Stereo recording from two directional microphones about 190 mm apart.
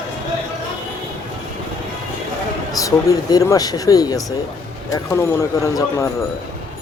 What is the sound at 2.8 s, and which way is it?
Speech, 20° left (ahead or behind).